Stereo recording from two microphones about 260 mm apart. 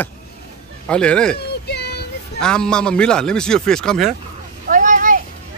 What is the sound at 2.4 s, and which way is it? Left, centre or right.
Speech, centre.